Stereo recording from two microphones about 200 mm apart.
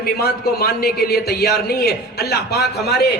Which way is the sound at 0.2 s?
50° left (ahead or behind).